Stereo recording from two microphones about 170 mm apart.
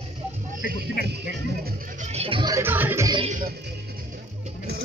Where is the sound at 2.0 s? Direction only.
35° right (ahead or behind); by 3.1 s 15° right (ahead or behind).